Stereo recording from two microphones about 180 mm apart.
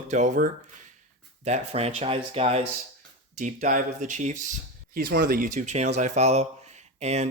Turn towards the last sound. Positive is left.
turn(degrees=-35)  # may be behind; listen again after turning